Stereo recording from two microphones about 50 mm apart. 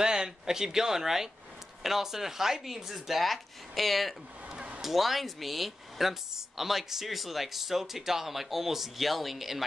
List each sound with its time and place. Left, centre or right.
0.0 s speech: centre
4.5 s a sound: centre
4.8 s speech: centre